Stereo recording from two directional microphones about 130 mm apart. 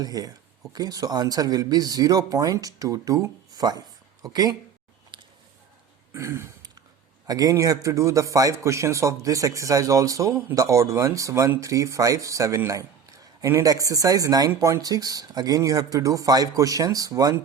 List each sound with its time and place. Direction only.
0.0 s a man's voice: 30° right (ahead or behind)
5.1 s a sound: 40° right (ahead or behind)
6.1 s throat clearing: 20° right (ahead or behind)
7.3 s a man's voice: 30° right (ahead or behind)